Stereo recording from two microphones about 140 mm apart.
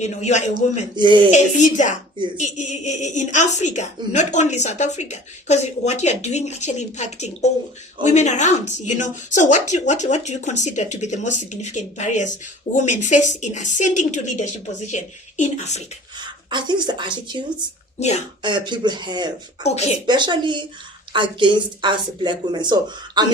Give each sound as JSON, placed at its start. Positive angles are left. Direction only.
{"t": 0.0, "sound": "speech", "side_deg": 55}
{"t": 0.9, "sound": "speech", "side_deg": -35}
{"t": 1.3, "sound": "speech", "side_deg": 60}
{"t": 16.2, "sound": "a woman's voice", "side_deg": -35}
{"t": 18.4, "sound": "speech", "side_deg": -35}
{"t": 19.6, "sound": "speech", "side_deg": 50}
{"t": 20.1, "sound": "speech", "side_deg": -35}